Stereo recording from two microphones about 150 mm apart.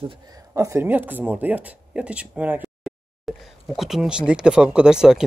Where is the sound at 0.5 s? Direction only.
15° right (ahead or behind).